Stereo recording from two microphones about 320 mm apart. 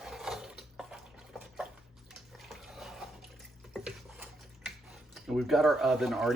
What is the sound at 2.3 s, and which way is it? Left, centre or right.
Bathtub, centre.